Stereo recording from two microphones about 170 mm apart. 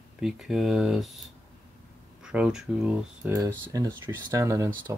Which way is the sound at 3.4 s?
20° right (ahead or behind).